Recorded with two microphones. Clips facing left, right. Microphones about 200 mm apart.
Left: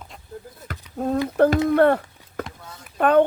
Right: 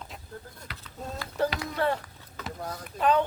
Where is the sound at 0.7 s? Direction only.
55° left (ahead or behind).